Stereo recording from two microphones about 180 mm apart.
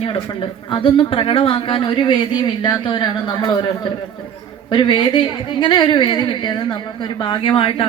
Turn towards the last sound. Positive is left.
turn(degrees=30)  # may be behind; listen again after turning